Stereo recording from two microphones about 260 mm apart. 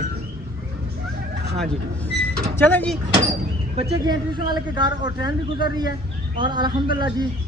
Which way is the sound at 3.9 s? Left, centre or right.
Centre.